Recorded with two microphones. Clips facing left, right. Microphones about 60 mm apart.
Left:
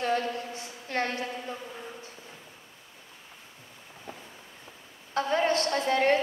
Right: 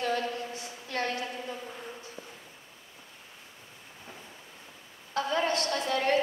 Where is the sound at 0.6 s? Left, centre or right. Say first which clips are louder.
Left 2 dB; left.